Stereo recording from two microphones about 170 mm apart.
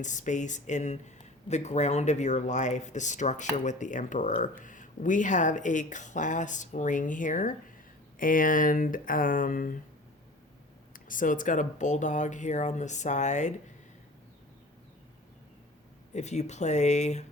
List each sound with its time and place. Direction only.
0.0 s speech: 45° left (ahead or behind)
10.9 s speech: 50° left (ahead or behind)
16.1 s speech: 40° left (ahead or behind)